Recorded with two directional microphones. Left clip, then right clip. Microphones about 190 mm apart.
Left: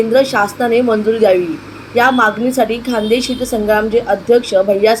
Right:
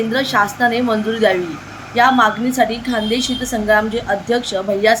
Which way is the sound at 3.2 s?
40° right (ahead or behind).